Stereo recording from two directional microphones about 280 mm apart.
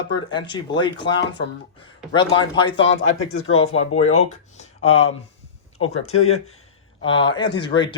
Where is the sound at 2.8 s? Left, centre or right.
Left.